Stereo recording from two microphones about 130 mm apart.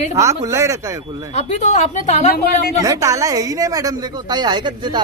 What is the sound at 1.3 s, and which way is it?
Speech, 60° left (ahead or behind).